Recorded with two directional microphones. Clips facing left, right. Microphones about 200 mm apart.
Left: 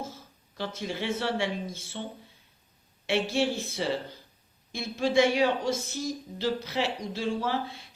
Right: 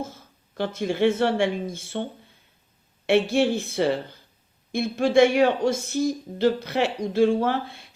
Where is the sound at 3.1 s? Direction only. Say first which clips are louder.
Right 7 dB; 55° right (ahead or behind).